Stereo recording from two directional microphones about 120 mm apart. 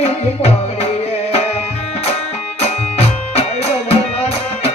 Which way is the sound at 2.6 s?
65° left (ahead or behind).